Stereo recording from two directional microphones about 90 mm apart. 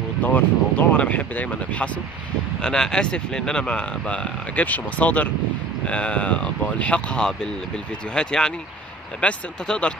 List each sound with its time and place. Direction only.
0.2 s speech: 20° left (ahead or behind)